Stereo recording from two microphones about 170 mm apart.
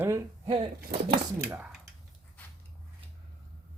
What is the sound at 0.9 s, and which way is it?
Speech, 60° right (ahead or behind).